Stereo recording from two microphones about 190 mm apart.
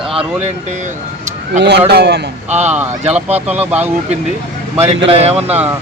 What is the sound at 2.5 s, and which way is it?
Speech, 35° right (ahead or behind).